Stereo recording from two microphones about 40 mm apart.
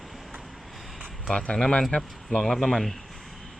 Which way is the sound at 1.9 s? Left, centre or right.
Left.